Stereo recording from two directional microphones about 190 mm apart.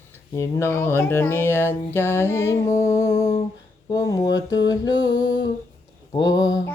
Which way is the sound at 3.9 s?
20° left (ahead or behind).